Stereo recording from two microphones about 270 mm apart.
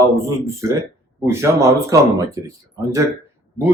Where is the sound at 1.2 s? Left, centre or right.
Centre.